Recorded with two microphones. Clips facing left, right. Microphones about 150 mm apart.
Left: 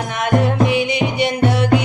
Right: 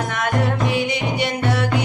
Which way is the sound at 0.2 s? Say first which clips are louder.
Left 6 dB; 20° left (ahead or behind).